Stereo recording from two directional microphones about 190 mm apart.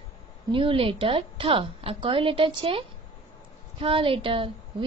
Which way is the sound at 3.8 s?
30° right (ahead or behind).